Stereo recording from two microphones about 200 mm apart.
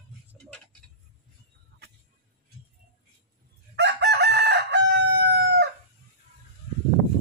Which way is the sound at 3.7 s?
60° right (ahead or behind).